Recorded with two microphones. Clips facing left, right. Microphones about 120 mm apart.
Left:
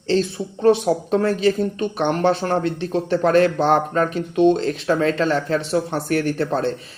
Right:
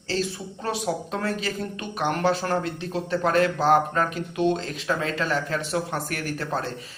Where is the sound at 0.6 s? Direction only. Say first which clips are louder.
Left 11 dB; 30° left (ahead or behind).